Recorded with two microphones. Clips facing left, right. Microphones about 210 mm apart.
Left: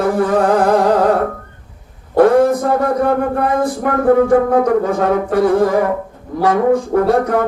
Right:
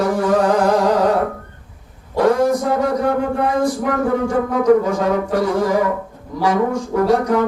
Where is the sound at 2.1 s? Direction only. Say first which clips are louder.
Left 5 dB; 55° left (ahead or behind).